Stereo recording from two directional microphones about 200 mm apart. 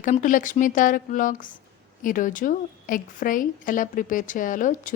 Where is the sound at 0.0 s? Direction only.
40° left (ahead or behind).